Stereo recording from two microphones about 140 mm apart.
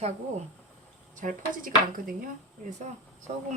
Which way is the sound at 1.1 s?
70° right (ahead or behind).